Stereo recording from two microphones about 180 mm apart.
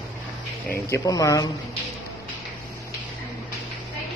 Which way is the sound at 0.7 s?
15° left (ahead or behind).